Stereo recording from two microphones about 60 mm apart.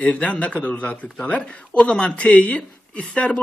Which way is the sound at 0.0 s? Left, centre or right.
Left.